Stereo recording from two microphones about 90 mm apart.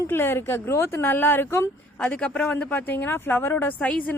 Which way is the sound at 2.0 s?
15° left (ahead or behind).